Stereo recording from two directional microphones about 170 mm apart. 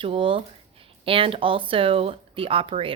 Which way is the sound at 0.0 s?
30° right (ahead or behind).